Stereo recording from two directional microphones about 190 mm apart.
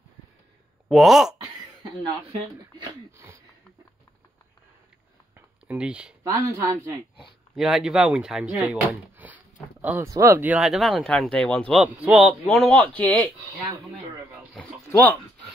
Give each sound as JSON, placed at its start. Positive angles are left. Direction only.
{"t": 0.8, "sound": "speech", "side_deg": 0}
{"t": 2.8, "sound": "speech", "side_deg": -20}
{"t": 5.7, "sound": "speech", "side_deg": -5}
{"t": 6.2, "sound": "speech", "side_deg": -15}
{"t": 7.5, "sound": "speech", "side_deg": 0}
{"t": 14.5, "sound": "speech", "side_deg": 5}